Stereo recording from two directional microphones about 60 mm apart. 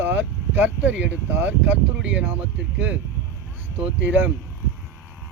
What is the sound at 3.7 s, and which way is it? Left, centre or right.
Speech, right.